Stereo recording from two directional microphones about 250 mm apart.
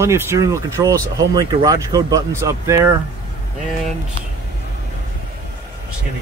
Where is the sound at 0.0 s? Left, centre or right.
Centre.